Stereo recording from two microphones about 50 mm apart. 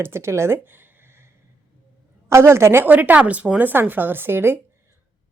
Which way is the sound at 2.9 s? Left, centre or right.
Right.